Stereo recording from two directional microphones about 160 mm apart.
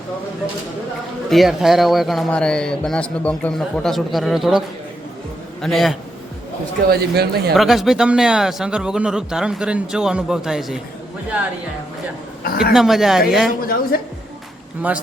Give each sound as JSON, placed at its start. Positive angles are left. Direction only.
{"t": 1.3, "sound": "a man's voice", "side_deg": 0}
{"t": 5.6, "sound": "a man's voice", "side_deg": 0}
{"t": 6.9, "sound": "speech", "side_deg": -85}
{"t": 7.5, "sound": "a man's voice", "side_deg": 0}
{"t": 12.5, "sound": "a man's voice", "side_deg": 80}
{"t": 12.7, "sound": "a man's voice", "side_deg": 0}
{"t": 13.6, "sound": "a man's voice", "side_deg": 65}